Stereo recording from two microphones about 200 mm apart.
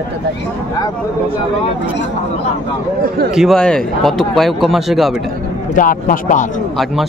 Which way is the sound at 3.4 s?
Centre (ahead or behind).